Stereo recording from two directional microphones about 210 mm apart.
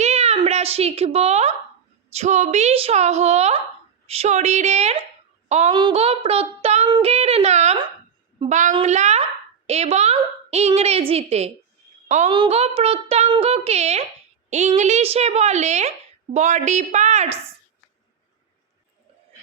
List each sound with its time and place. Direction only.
0.0 s a sound: 30° right (ahead or behind)
2.1 s a woman's voice: 35° right (ahead or behind)
5.5 s child singing: 30° right (ahead or behind)
8.4 s a woman's voice: 35° right (ahead or behind)